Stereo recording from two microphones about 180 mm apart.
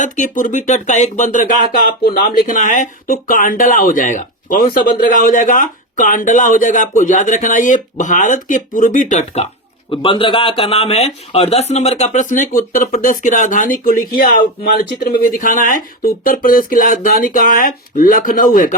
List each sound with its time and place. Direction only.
0.0 s speech: 45° left (ahead or behind)
9.9 s speech: 30° left (ahead or behind); by 18.7 s 50° left (ahead or behind)